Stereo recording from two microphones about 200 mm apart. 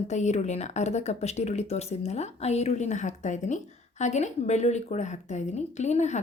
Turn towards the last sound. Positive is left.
turn(degrees=35)  # may be behind; listen again after turning